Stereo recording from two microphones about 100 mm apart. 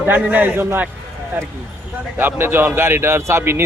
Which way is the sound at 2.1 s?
25° right (ahead or behind).